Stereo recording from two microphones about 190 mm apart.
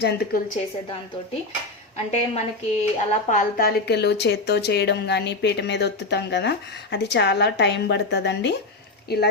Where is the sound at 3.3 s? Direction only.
45° left (ahead or behind).